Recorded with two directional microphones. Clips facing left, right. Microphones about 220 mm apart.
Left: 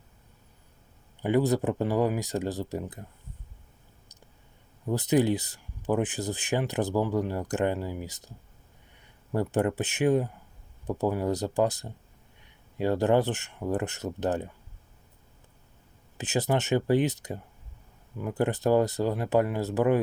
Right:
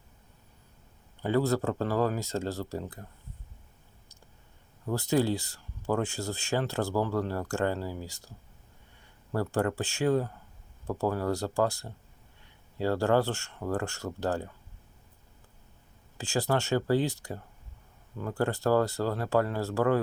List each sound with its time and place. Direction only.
1.2 s speech: 15° left (ahead or behind)
4.9 s speech: 20° left (ahead or behind)
9.3 s speech: 20° left (ahead or behind)
16.1 s speech: 20° left (ahead or behind)